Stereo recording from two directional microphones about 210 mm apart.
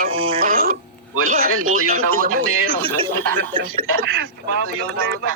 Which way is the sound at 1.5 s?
85° right.